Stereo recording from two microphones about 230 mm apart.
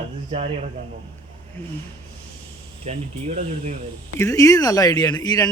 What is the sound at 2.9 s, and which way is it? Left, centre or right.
Speech, right.